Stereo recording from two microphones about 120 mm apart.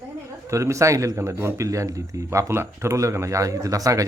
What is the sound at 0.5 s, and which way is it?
A man's voice, 25° right (ahead or behind).